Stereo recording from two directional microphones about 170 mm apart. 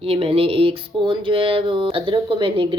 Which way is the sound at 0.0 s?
35° right (ahead or behind).